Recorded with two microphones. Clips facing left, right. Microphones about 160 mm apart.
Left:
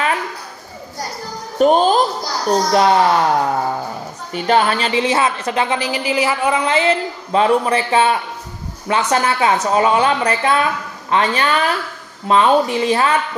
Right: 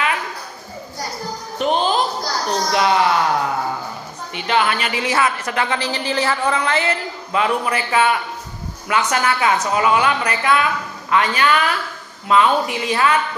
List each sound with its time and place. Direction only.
1.6 s a woman's voice: 45° left (ahead or behind)
4.3 s a woman's voice: 40° left (ahead or behind); by 7.0 s 20° left (ahead or behind)
7.3 s speech: 30° left (ahead or behind)